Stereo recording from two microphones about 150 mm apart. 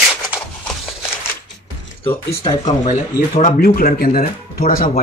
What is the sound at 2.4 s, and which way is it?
Speech, 55° left (ahead or behind).